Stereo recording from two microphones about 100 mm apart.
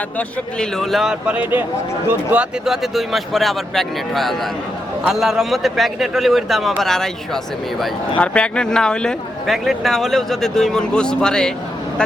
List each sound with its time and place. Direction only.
0.2 s a man's voice: 5° left (ahead or behind)
1.3 s speech: 15° right (ahead or behind)
2.6 s a man's voice: centre (ahead or behind)
8.1 s a man's voice: 10° left (ahead or behind)